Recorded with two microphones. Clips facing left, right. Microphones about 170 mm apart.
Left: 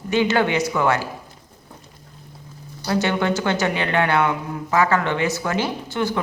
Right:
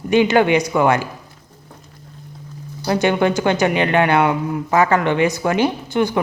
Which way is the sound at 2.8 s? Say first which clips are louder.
Right 4 dB; 15° right (ahead or behind).